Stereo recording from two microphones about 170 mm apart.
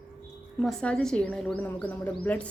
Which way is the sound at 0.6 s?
5° left (ahead or behind).